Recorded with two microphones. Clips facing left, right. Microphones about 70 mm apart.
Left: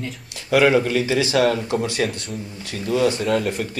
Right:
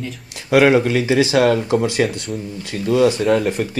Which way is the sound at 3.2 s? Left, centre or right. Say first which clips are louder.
Right 4 dB; right.